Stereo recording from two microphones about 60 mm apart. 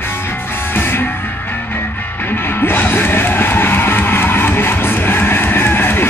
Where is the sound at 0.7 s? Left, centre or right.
Left.